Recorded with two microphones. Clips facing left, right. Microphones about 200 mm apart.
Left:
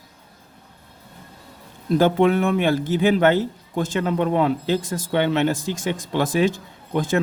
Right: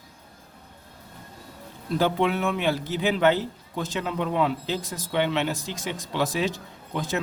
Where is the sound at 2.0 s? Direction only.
50° left (ahead or behind).